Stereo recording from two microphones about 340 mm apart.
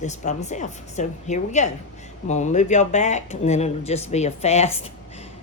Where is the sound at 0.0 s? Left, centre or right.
Left.